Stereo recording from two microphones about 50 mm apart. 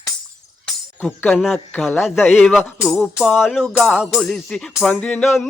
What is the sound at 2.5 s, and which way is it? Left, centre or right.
Music, centre.